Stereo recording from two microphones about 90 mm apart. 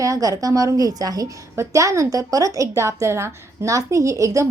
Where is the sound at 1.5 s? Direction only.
35° right (ahead or behind).